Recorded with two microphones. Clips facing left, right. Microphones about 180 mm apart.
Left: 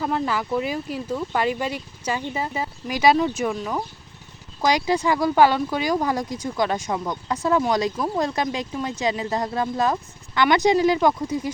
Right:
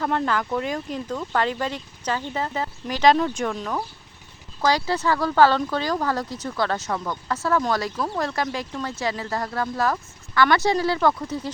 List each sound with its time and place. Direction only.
0.0 s speech: 5° left (ahead or behind)